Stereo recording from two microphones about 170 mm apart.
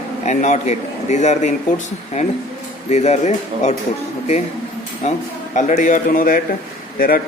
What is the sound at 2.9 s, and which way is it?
Speech, 40° left (ahead or behind).